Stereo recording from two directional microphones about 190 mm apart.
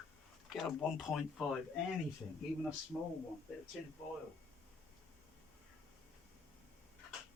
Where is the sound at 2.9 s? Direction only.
Centre (ahead or behind).